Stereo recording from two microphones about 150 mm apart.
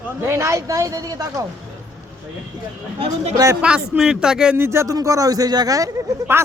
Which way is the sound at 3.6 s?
5° right (ahead or behind).